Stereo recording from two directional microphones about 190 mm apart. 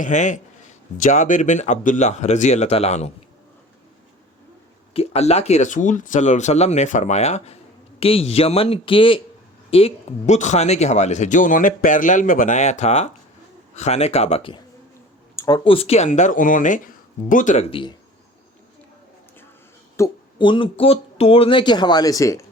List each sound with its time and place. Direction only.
0.0 s speech: 40° left (ahead or behind)
4.9 s speech: 35° left (ahead or behind)
20.0 s speech: 25° left (ahead or behind)